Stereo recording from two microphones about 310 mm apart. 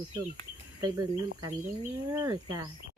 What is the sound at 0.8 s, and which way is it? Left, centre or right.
Speech, centre.